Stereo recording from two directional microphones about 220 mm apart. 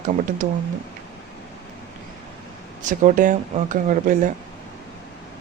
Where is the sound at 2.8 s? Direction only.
35° right (ahead or behind).